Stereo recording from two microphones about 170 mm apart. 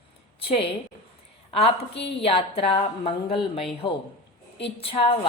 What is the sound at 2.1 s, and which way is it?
Speech, 35° left (ahead or behind).